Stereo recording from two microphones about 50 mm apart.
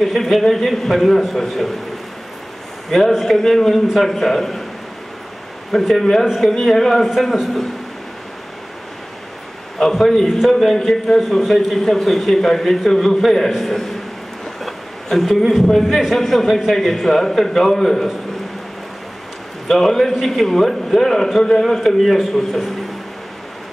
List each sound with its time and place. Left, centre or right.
0.0 s a man's voice: centre
3.2 s a man's voice: centre
5.7 s a man's voice: centre
9.8 s a man's voice: centre
14.6 s a sound: centre
15.6 s a man's voice: centre
19.7 s a man's voice: centre